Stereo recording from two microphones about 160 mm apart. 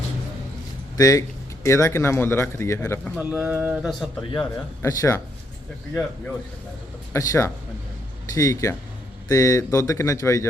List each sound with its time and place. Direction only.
0.9 s speech: 20° left (ahead or behind)
3.2 s speech: 10° right (ahead or behind)
4.4 s speech: 20° left (ahead or behind)
7.1 s speech: 15° left (ahead or behind)